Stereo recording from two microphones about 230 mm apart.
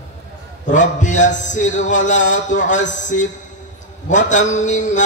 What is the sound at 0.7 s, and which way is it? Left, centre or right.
Mantra, left.